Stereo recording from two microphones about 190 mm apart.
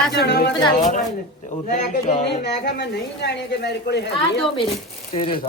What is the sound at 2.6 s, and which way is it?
A woman's voice, 65° left (ahead or behind).